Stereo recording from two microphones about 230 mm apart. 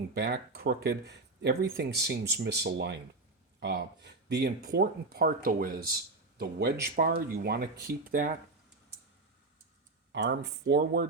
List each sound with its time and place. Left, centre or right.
0.1 s speech: right
10.1 s speech: right